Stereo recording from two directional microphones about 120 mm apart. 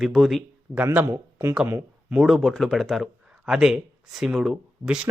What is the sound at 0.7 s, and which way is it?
Speech, 15° right (ahead or behind).